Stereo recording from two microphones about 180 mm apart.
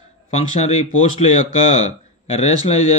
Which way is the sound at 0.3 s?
35° left (ahead or behind).